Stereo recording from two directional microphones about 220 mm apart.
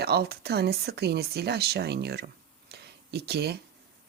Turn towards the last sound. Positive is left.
turn(degrees=-45)  # may be behind; listen again after turning